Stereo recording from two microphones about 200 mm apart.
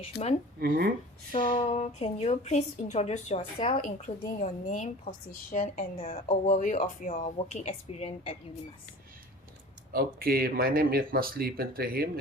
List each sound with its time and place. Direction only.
0.1 s speech: 60° left (ahead or behind)
0.6 s speech: 50° right (ahead or behind)
1.3 s a woman's voice: 25° left (ahead or behind)
6.0 s a woman's voice: 30° left (ahead or behind)
9.9 s speech: 50° right (ahead or behind)